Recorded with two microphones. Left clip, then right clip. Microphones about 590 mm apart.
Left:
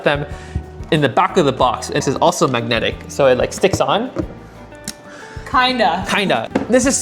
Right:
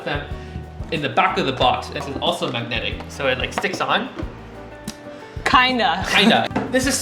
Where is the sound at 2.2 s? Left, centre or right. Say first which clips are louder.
Left 7 dB; left.